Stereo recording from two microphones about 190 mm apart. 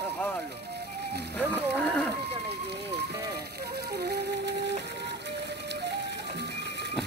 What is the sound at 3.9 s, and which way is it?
Flute, 60° right (ahead or behind).